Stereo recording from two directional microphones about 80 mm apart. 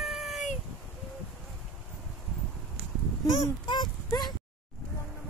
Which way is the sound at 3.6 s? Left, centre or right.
Left.